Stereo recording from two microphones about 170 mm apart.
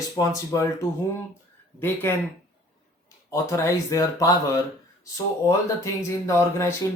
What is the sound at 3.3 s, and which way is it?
Speech, 20° left (ahead or behind).